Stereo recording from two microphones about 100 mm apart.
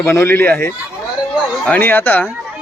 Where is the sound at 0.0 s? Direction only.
25° left (ahead or behind).